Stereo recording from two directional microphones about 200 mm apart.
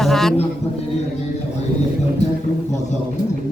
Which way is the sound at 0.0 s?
Centre (ahead or behind).